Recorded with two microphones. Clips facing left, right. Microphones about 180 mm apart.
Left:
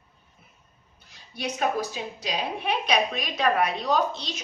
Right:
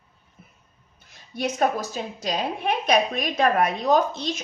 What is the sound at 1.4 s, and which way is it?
A woman's voice, 45° right (ahead or behind).